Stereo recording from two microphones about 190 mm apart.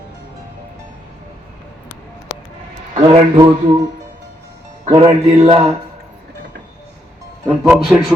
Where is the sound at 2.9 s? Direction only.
25° right (ahead or behind).